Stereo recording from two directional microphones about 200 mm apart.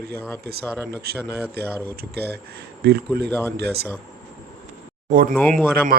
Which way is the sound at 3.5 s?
55° right (ahead or behind).